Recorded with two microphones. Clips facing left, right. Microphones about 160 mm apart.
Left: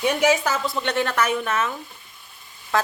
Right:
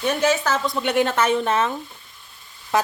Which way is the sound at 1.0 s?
25° right (ahead or behind).